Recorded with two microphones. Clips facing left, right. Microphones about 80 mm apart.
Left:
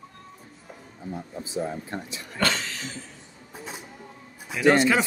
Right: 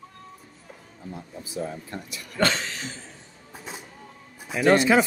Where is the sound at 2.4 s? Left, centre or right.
Right.